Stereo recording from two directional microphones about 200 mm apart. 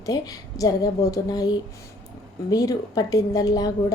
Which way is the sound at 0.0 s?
15° left (ahead or behind).